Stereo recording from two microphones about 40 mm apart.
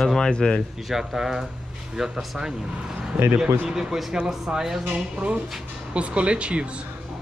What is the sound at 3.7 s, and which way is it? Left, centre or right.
Speech, centre.